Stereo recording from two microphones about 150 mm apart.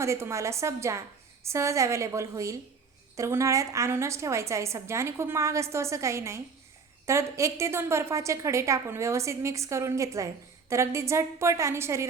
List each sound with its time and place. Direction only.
0.0 s a woman's voice: 20° right (ahead or behind)